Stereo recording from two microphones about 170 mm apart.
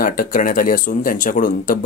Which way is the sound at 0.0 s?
55° left (ahead or behind).